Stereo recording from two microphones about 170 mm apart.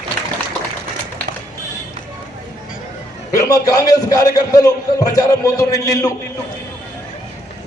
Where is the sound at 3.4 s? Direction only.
20° left (ahead or behind).